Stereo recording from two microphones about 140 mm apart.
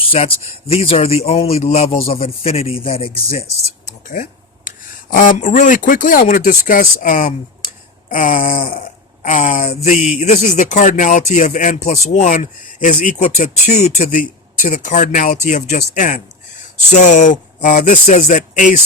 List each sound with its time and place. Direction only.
0.0 s speech: 40° left (ahead or behind)
4.1 s computer keyboard: 75° left (ahead or behind)
5.1 s speech: 70° left (ahead or behind)
16.9 s speech: 60° left (ahead or behind)